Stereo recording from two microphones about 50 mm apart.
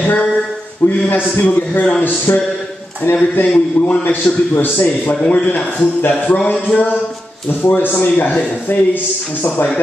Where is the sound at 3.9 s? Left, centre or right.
Left.